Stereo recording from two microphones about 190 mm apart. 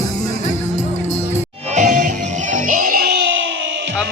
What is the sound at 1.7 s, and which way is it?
Music, 45° right (ahead or behind).